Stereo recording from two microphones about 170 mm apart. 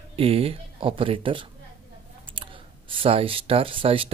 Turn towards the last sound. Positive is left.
turn(degrees=-35)  # may be behind; listen again after turning